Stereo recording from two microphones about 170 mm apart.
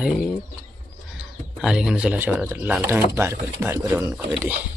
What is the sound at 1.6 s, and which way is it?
Speech, 5° right (ahead or behind).